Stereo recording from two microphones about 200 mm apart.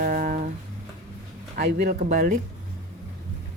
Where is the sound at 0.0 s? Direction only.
45° right (ahead or behind).